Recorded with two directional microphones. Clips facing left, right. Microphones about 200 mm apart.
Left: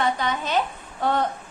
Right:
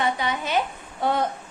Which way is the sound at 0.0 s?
15° right (ahead or behind).